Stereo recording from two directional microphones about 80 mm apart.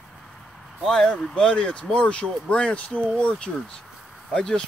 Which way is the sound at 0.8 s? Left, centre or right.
Centre.